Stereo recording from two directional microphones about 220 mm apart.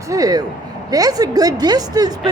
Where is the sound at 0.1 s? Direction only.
15° right (ahead or behind).